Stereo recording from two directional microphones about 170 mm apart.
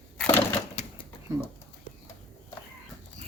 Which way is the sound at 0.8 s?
40° left (ahead or behind).